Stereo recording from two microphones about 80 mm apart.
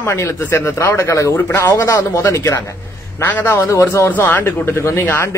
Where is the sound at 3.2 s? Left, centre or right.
Left.